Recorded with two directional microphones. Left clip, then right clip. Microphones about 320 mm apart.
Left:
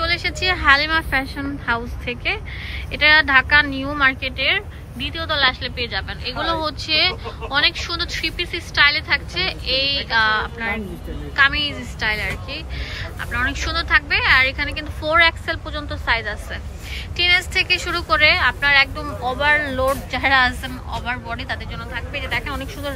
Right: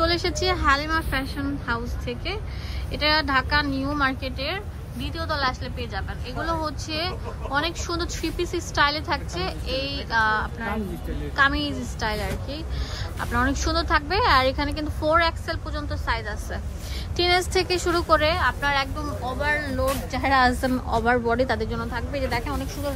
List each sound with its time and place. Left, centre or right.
0.0 s a sound: centre
0.3 s a woman's voice: centre
20.9 s a woman's voice: right